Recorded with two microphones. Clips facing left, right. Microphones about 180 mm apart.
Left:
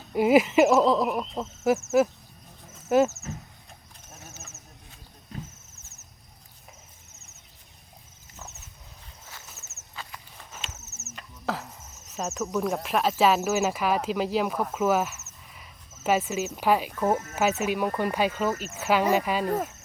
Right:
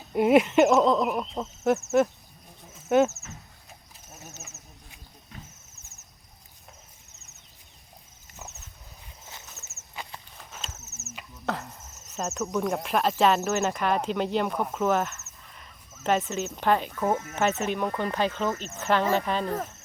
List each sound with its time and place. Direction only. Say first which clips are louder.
0.1 s speech: even; centre (ahead or behind)
2.7 s insect: even; centre (ahead or behind)
4.1 s a sound: right 1 dB; centre (ahead or behind)
4.4 s a sound: even; 15° right (ahead or behind)
9.6 s walk: right 1 dB; centre (ahead or behind)
9.9 s walk: right 2 dB; 15° right (ahead or behind)
10.3 s horse: left 1 dB; centre (ahead or behind)
11.1 s speech: even; 5° right (ahead or behind)